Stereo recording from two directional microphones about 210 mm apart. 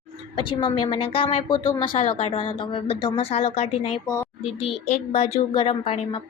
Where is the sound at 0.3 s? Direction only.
25° left (ahead or behind).